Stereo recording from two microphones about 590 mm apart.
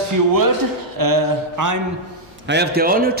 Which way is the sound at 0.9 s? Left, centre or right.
Right.